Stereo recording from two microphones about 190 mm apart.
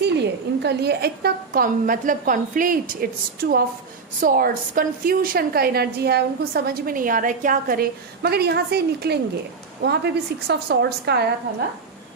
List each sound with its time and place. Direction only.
0.0 s a woman's voice: 60° right (ahead or behind)
4.2 s a woman's voice: 50° right (ahead or behind)